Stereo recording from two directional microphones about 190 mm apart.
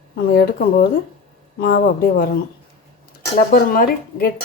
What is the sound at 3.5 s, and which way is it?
Speech, 50° left (ahead or behind).